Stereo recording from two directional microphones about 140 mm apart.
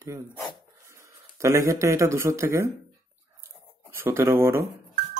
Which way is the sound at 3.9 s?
15° right (ahead or behind).